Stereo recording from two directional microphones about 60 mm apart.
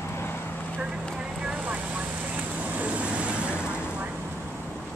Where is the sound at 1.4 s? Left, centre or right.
Right.